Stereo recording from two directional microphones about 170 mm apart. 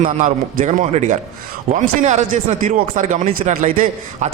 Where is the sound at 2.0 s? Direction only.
45° right (ahead or behind).